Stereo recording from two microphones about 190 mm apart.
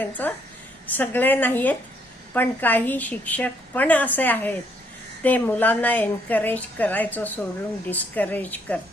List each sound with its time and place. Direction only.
0.0 s a woman's voice: 10° left (ahead or behind)